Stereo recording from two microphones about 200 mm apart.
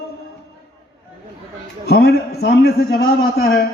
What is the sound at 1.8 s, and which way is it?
A man's voice, 55° left (ahead or behind).